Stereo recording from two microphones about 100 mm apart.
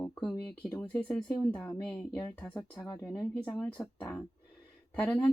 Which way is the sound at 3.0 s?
30° left (ahead or behind).